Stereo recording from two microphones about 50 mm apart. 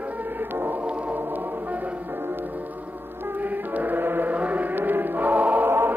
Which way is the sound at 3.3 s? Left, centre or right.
Right.